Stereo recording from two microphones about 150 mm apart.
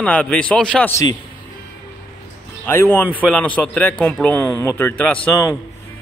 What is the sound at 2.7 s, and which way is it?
A man's voice, 15° left (ahead or behind).